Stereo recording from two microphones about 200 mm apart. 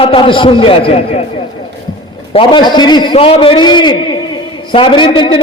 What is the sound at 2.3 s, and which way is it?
A man's voice, 20° left (ahead or behind).